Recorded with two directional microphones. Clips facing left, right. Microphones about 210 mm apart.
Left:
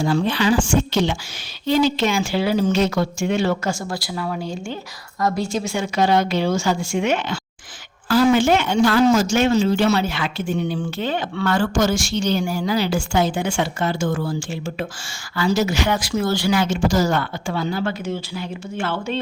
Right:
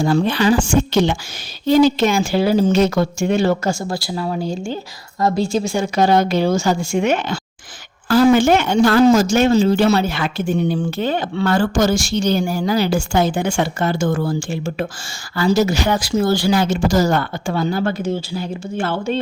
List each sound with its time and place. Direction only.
0.0 s a woman's voice: 45° right (ahead or behind)